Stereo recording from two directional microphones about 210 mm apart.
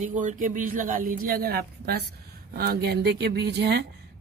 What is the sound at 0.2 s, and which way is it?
A woman's voice, 40° right (ahead or behind).